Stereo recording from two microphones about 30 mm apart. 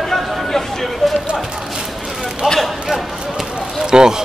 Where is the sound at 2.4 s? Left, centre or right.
Right.